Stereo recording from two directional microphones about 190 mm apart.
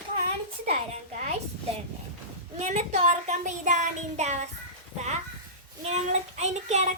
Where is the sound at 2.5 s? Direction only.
35° right (ahead or behind).